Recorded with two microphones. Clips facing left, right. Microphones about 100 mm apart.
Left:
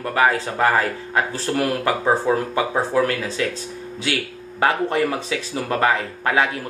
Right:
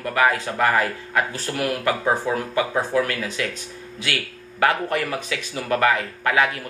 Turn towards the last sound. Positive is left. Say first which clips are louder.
# left 1 dB
turn(degrees=30)  # may be behind; listen again after turning